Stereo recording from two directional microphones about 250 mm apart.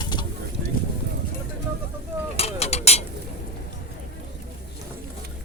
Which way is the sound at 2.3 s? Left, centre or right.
Left.